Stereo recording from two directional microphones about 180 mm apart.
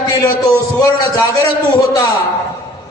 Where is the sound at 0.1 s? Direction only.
20° left (ahead or behind).